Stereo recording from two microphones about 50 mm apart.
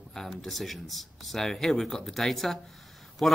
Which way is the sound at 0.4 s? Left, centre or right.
Centre.